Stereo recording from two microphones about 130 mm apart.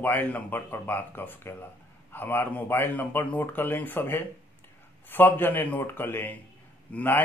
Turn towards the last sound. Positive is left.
turn(degrees=15)  # may be behind; listen again after turning